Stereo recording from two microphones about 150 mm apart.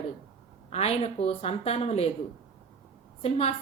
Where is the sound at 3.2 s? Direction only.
45° left (ahead or behind).